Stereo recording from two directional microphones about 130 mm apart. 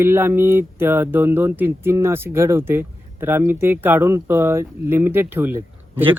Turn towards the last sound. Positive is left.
turn(degrees=-15)  # may be behind; listen again after turning